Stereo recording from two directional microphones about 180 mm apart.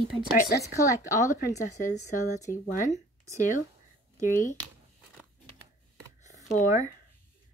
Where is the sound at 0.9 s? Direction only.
15° left (ahead or behind).